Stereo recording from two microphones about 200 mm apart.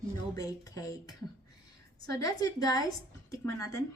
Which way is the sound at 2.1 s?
15° left (ahead or behind).